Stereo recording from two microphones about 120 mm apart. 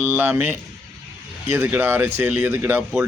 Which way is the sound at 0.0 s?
15° right (ahead or behind).